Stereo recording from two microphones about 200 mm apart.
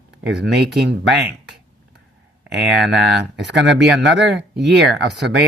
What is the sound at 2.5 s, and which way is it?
Speech, 60° right (ahead or behind).